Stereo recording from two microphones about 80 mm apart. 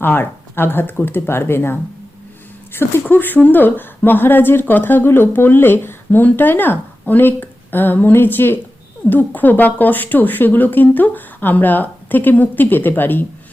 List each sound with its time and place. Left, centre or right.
0.0 s speech: left